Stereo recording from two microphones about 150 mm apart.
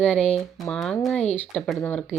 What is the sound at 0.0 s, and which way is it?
Speech, 5° left (ahead or behind).